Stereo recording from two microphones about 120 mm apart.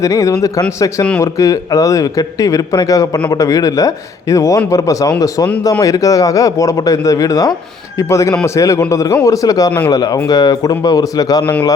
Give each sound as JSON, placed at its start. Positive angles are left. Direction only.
{"t": 0.0, "sound": "a man's voice", "side_deg": 30}